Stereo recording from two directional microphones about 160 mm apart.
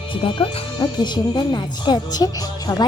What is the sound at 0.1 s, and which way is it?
Speech, 30° left (ahead or behind).